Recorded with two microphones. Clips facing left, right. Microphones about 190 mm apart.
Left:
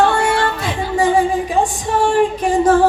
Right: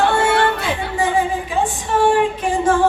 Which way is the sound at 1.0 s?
40° left (ahead or behind).